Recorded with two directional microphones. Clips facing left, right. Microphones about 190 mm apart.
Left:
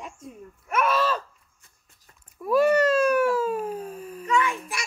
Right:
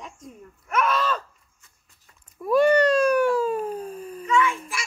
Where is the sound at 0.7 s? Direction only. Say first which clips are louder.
Even; 5° left (ahead or behind).